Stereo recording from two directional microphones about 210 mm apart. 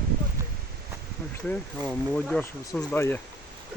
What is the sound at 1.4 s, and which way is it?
Speech, 5° left (ahead or behind).